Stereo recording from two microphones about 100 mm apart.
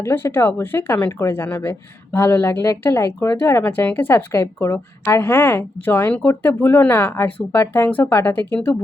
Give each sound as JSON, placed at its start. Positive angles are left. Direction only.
{"t": 0.0, "sound": "speech", "side_deg": 25}